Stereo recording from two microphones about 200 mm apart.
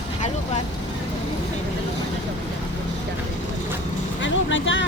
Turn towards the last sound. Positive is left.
turn(degrees=70)  # may be behind; listen again after turning